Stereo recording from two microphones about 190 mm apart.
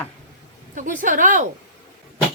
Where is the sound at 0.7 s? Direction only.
45° right (ahead or behind).